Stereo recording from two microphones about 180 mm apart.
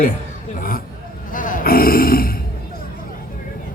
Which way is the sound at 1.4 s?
50° left (ahead or behind).